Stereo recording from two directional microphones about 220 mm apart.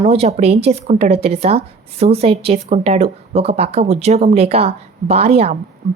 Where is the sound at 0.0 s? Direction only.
30° right (ahead or behind).